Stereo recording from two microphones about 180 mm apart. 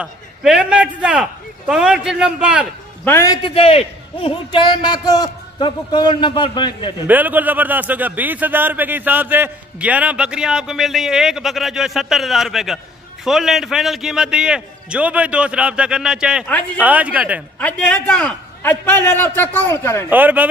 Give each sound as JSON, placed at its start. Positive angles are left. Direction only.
{"t": 0.0, "sound": "speech", "side_deg": -5}
{"t": 3.1, "sound": "a man's voice", "side_deg": 15}
{"t": 3.4, "sound": "a man's voice", "side_deg": 30}
{"t": 7.1, "sound": "speech", "side_deg": -10}
{"t": 16.4, "sound": "a man's voice", "side_deg": 10}
{"t": 16.8, "sound": "speech", "side_deg": -10}
{"t": 17.6, "sound": "a man's voice", "side_deg": 5}
{"t": 20.1, "sound": "speech", "side_deg": -10}